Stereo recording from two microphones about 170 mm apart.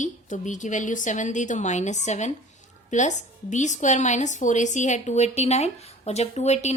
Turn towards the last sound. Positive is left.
turn(degrees=40)  # may be behind; listen again after turning